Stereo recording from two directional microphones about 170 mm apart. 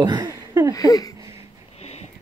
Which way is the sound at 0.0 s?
25° right (ahead or behind).